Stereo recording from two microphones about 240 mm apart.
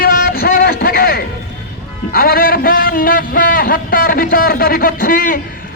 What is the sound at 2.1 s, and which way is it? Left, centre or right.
A man's voice, left.